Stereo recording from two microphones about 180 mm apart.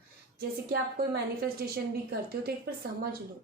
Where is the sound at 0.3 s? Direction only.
60° right (ahead or behind).